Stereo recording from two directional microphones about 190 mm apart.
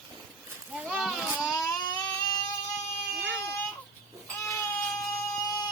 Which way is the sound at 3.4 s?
15° left (ahead or behind).